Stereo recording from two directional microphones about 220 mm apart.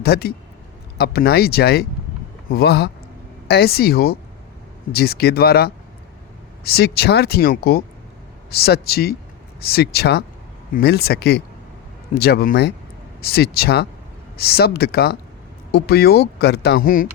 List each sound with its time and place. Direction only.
0.0 s speech: 45° left (ahead or behind)